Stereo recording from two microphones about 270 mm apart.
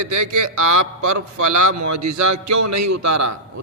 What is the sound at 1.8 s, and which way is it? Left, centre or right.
A man's voice, right.